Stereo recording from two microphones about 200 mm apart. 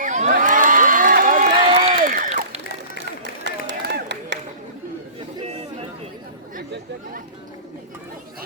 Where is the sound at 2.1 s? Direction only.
45° right (ahead or behind).